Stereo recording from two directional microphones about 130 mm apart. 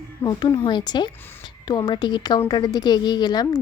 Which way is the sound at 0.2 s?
30° left (ahead or behind).